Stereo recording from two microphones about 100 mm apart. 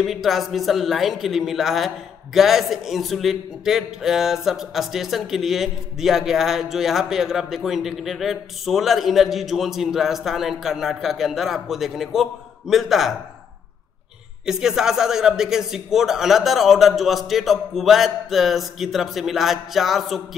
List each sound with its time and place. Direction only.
0.0 s a man's voice: centre (ahead or behind)
14.4 s a man's voice: 5° right (ahead or behind)